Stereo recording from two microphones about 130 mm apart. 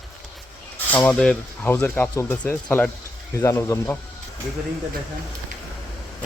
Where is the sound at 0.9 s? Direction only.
10° left (ahead or behind).